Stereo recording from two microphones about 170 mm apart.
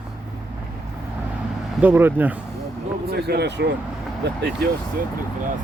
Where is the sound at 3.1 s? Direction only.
75° right (ahead or behind).